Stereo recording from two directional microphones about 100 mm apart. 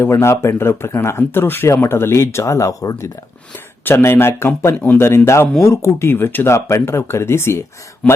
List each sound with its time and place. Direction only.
0.0 s speech: 25° left (ahead or behind)
3.8 s speech: 20° left (ahead or behind)
8.0 s a man's voice: 10° left (ahead or behind)